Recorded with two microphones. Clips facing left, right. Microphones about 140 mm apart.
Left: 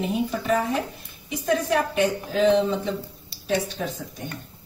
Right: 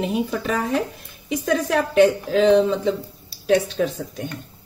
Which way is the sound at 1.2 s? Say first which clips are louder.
Right 2 dB; 90° right.